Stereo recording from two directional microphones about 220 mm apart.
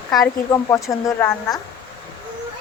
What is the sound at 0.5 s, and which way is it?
A woman's voice, 15° left (ahead or behind).